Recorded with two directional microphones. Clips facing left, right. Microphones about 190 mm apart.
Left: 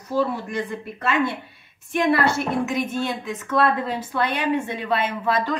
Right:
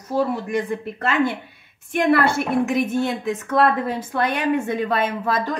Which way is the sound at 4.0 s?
50° right (ahead or behind).